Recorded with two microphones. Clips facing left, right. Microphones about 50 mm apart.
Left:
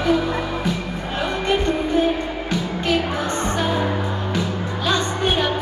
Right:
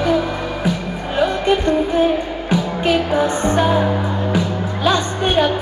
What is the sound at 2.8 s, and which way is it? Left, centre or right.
Music, centre.